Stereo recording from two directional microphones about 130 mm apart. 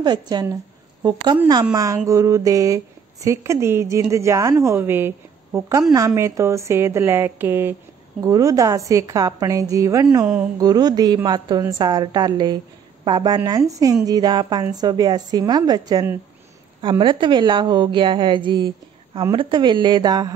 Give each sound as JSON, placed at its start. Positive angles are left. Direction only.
{"t": 0.0, "sound": "a woman's voice", "side_deg": -30}
{"t": 5.7, "sound": "a woman's voice", "side_deg": -25}
{"t": 10.2, "sound": "a woman's voice", "side_deg": -10}
{"t": 10.6, "sound": "a woman's voice", "side_deg": -30}